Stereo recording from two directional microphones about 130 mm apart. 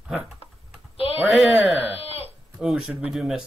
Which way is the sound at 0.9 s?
45° left (ahead or behind).